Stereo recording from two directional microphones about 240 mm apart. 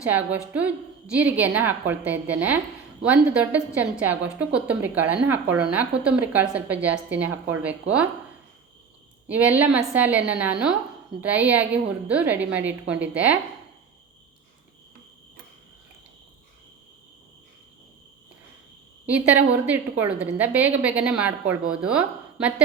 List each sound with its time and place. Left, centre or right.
0.1 s a woman's voice: centre
9.2 s a woman's voice: centre
19.4 s a woman's voice: centre